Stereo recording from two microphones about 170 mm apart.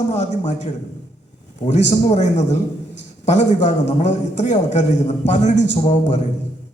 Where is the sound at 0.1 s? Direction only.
40° left (ahead or behind).